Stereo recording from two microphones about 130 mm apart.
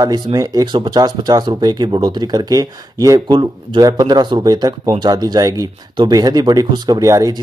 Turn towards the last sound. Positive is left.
turn(degrees=-25)  # may be behind; listen again after turning